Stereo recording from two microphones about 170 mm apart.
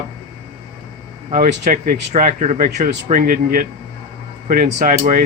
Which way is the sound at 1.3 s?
50° right (ahead or behind).